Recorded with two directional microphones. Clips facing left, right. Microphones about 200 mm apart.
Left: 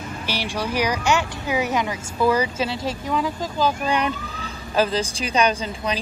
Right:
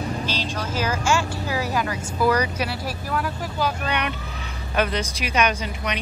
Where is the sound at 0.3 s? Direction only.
10° left (ahead or behind).